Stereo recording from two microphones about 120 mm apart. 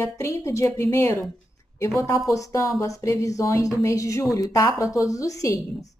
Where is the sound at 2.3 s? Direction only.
25° left (ahead or behind).